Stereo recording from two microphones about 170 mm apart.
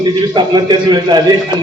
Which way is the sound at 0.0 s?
25° right (ahead or behind).